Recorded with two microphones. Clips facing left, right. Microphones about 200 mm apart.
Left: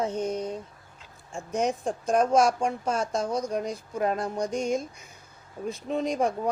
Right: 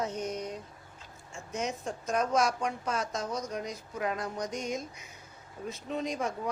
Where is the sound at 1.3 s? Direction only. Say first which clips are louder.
Left 8 dB; 55° left (ahead or behind).